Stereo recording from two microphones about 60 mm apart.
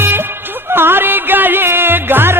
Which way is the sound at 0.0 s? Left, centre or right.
Right.